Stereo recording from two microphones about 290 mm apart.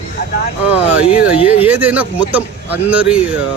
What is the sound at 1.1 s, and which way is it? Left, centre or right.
Speech, left.